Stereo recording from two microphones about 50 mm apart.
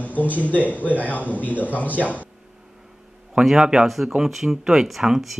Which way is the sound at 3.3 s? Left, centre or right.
Centre.